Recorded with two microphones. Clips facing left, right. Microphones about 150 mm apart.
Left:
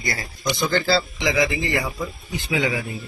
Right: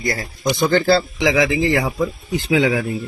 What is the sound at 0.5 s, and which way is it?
Speech, 55° right (ahead or behind).